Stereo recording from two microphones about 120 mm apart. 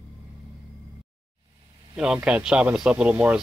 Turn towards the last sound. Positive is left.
turn(degrees=-10)  # may be behind; listen again after turning